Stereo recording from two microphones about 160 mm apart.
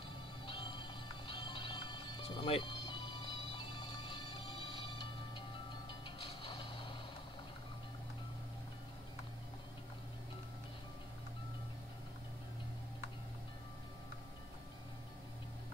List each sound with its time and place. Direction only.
0.5 s music: 30° left (ahead or behind)